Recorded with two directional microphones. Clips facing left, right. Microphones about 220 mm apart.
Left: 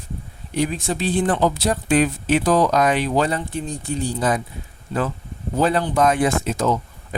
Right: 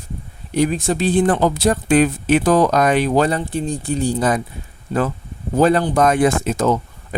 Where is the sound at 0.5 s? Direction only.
40° right (ahead or behind).